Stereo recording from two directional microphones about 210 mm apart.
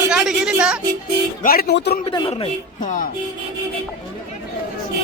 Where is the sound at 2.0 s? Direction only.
25° left (ahead or behind).